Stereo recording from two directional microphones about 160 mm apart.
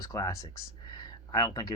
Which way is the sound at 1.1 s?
25° left (ahead or behind).